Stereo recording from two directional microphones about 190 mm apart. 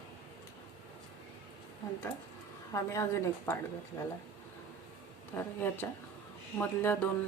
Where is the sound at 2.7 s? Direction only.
15° left (ahead or behind).